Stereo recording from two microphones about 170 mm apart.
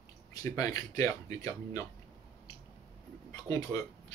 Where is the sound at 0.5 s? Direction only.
20° left (ahead or behind).